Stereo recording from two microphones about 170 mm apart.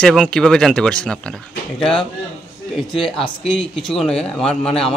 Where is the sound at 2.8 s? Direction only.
Centre (ahead or behind).